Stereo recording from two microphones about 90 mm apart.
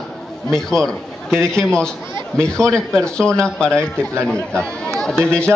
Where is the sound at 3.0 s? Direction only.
10° left (ahead or behind).